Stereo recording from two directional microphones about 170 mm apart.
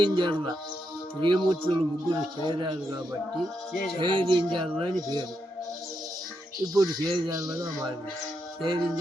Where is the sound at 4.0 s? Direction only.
25° right (ahead or behind).